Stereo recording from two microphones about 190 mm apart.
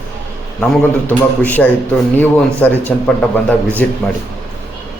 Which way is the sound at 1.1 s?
10° left (ahead or behind).